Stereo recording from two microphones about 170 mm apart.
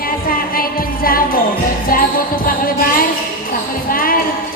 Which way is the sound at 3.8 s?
55° left (ahead or behind).